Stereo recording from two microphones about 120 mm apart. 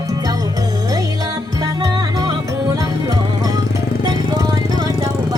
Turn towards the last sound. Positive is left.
turn(degrees=-30)  # may be behind; listen again after turning